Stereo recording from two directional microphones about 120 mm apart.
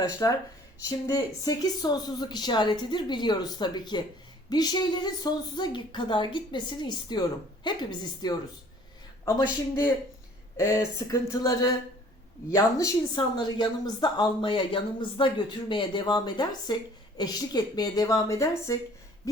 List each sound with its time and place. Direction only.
0.0 s a woman's voice: 30° left (ahead or behind)
10.6 s a woman's voice: 25° left (ahead or behind)